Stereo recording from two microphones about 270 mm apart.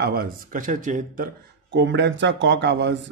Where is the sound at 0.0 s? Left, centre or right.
Right.